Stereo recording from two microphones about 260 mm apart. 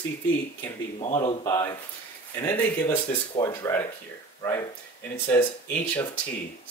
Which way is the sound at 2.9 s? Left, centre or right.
Centre.